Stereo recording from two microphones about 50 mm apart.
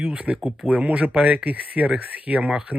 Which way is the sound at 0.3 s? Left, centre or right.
Right.